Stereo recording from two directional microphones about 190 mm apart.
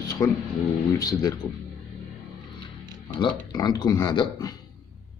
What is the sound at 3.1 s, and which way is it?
Speech, 25° left (ahead or behind).